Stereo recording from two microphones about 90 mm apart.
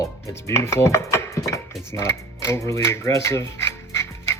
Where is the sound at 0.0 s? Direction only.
35° left (ahead or behind).